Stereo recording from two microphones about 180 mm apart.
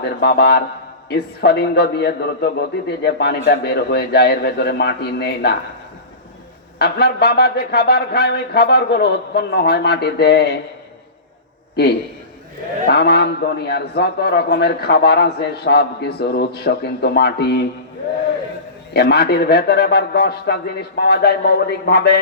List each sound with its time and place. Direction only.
0.0 s a man's voice: 65° left (ahead or behind)
6.7 s a man's voice: 65° left (ahead or behind)
12.9 s a man's voice: 65° left (ahead or behind)
18.9 s a man's voice: 65° left (ahead or behind)